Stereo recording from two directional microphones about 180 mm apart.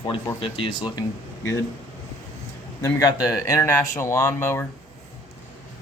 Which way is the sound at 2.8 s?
20° left (ahead or behind).